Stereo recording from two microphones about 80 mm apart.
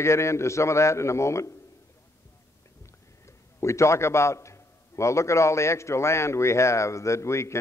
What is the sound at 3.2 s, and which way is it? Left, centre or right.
A man's voice, left.